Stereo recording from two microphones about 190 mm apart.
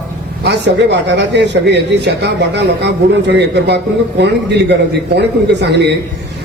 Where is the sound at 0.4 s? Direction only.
65° right (ahead or behind).